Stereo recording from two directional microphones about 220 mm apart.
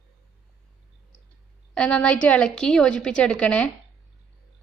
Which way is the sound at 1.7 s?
5° left (ahead or behind).